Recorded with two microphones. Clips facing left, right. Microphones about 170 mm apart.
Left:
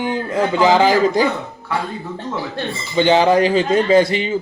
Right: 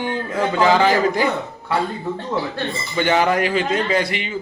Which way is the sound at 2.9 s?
25° left (ahead or behind).